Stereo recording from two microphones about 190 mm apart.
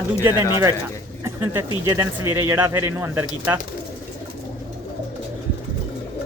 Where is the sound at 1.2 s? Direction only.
15° right (ahead or behind).